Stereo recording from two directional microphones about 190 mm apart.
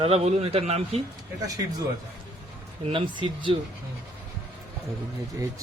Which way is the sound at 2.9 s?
25° right (ahead or behind).